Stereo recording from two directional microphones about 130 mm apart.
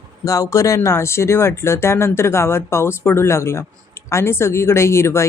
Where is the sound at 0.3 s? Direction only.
25° left (ahead or behind).